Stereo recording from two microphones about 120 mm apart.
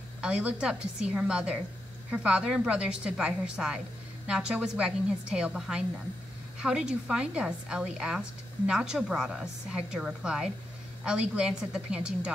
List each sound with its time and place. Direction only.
0.2 s a woman's voice: 10° right (ahead or behind)